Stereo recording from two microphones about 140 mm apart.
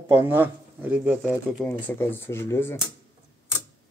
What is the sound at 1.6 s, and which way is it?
Speech, 10° left (ahead or behind).